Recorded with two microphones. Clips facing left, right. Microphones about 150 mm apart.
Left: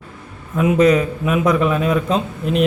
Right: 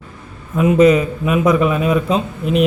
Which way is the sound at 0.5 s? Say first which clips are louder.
Right 2 dB; centre (ahead or behind).